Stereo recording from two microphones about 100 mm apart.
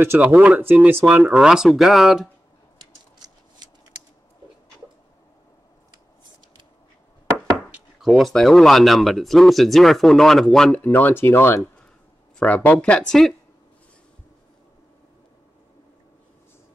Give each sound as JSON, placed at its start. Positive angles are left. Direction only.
{"t": 0.0, "sound": "speech", "side_deg": -20}
{"t": 3.6, "sound": "shuffling cards", "side_deg": -45}
{"t": 8.0, "sound": "speech", "side_deg": 0}
{"t": 10.8, "sound": "speech", "side_deg": 20}
{"t": 12.4, "sound": "speech", "side_deg": 10}